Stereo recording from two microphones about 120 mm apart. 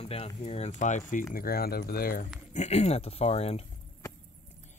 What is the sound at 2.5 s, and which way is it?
Speech, 65° left (ahead or behind).